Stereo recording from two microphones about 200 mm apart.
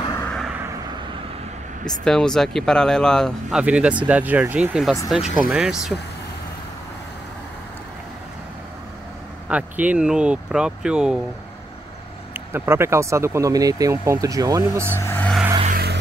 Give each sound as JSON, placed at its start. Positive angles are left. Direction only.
{"t": 0.1, "sound": "vehicle", "side_deg": 5}
{"t": 1.9, "sound": "speech", "side_deg": 5}
{"t": 9.5, "sound": "speech", "side_deg": -5}
{"t": 12.4, "sound": "speech", "side_deg": -10}
{"t": 15.0, "sound": "vehicle", "side_deg": 10}
{"t": 15.6, "sound": "vehicle", "side_deg": -50}